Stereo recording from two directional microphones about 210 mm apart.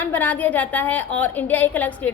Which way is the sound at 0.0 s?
10° left (ahead or behind).